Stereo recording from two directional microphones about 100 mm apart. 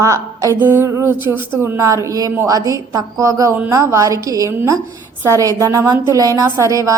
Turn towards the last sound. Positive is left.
turn(degrees=-35)  # may be behind; listen again after turning